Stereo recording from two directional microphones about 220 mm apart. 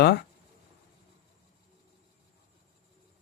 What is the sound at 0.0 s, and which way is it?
Speech, 50° left (ahead or behind).